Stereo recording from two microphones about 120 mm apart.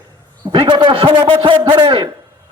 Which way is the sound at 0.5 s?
45° right (ahead or behind).